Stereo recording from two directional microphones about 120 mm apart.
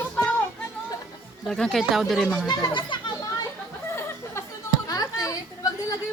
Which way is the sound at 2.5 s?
40° left (ahead or behind).